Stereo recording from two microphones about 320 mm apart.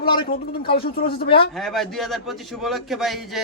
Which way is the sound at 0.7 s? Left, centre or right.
Left.